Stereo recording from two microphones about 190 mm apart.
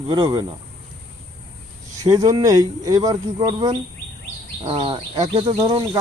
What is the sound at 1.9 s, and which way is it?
Speech, 20° right (ahead or behind).